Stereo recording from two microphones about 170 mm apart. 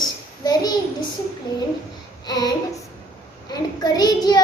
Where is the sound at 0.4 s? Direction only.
25° left (ahead or behind).